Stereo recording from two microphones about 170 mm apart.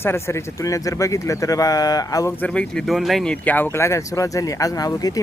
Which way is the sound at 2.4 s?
5° left (ahead or behind).